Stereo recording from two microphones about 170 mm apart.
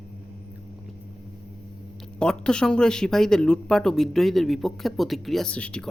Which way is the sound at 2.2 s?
5° left (ahead or behind).